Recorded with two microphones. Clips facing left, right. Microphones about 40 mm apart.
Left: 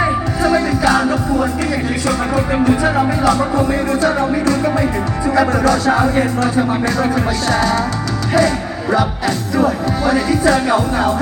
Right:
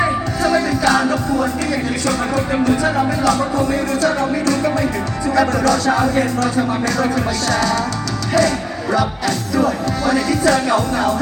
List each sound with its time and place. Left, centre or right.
0.0 s music: centre